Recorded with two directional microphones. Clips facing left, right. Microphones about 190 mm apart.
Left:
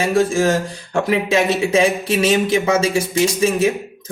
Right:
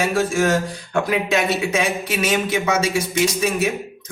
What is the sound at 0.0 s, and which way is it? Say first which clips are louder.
Speech: left 3 dB; 30° left (ahead or behind).